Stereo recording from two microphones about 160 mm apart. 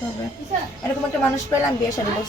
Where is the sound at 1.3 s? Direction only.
20° left (ahead or behind).